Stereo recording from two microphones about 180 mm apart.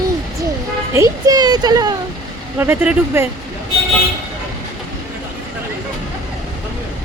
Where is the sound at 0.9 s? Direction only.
20° right (ahead or behind).